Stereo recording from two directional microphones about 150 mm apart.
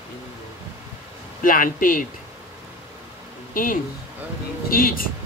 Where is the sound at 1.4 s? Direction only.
65° left (ahead or behind).